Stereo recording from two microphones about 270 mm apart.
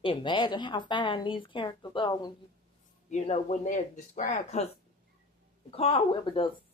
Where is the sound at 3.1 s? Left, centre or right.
Left.